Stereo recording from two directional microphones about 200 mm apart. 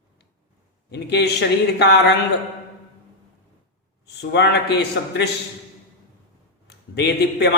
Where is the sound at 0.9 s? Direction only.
55° left (ahead or behind).